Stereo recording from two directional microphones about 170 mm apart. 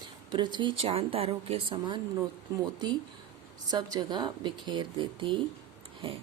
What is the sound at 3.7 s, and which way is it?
A woman's voice, 25° right (ahead or behind).